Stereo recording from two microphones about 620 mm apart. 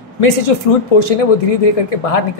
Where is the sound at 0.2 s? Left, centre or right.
Left.